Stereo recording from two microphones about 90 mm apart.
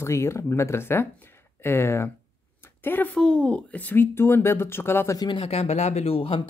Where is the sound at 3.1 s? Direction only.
10° left (ahead or behind); by 5.1 s 25° left (ahead or behind).